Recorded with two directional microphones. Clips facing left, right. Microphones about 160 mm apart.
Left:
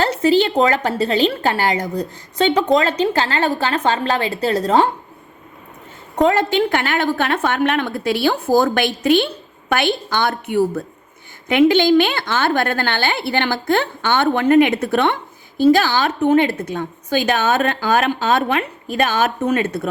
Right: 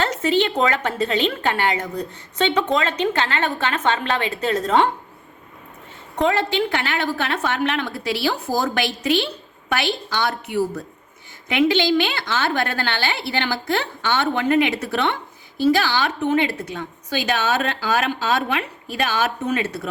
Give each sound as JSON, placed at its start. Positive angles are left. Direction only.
{"t": 0.0, "sound": "a woman's voice", "side_deg": 35}
{"t": 6.1, "sound": "a woman's voice", "side_deg": 45}